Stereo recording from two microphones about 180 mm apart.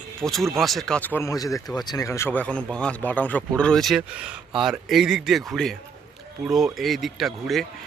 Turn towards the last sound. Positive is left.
turn(degrees=0)  # may be behind; listen again after turning